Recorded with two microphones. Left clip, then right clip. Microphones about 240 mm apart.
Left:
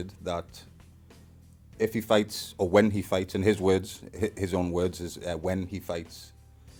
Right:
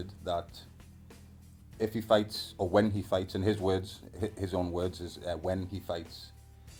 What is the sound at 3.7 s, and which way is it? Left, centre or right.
A man's voice, left.